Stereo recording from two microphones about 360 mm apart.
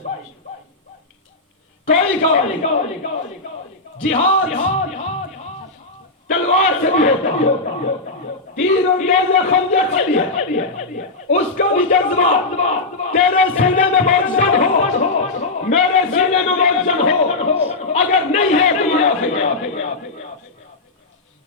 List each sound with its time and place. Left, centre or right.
2.3 s a man's voice: centre
4.0 s music: centre
6.5 s a man's voice: centre
8.5 s a man's voice: centre
14.3 s music: centre